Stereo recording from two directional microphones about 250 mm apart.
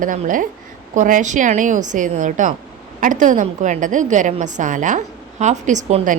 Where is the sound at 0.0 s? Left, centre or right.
Right.